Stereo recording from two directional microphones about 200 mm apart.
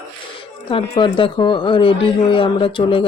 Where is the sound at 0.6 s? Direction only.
25° left (ahead or behind).